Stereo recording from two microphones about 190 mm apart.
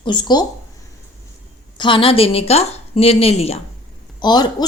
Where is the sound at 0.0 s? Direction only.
25° left (ahead or behind).